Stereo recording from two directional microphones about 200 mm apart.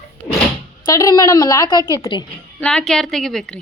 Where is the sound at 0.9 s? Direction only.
20° left (ahead or behind).